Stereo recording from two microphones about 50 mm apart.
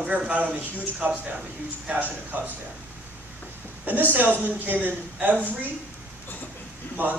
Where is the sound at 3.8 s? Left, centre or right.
Right.